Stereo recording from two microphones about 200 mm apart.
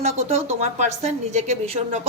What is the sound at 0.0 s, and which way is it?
A woman's voice, 35° right (ahead or behind).